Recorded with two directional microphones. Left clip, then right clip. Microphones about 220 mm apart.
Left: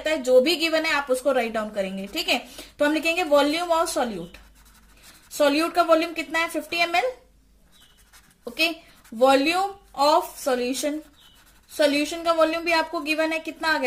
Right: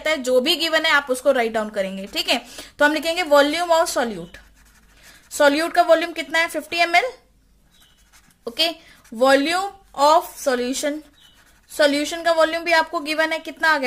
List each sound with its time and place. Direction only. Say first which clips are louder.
0.0 s a woman's voice: even; 35° right (ahead or behind)
5.4 s a woman's voice: right 4 dB; 40° right (ahead or behind)
9.3 s a woman's voice: right 2 dB; 35° right (ahead or behind)